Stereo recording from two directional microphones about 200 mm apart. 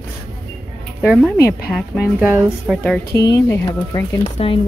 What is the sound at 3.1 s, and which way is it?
Speech, 20° left (ahead or behind).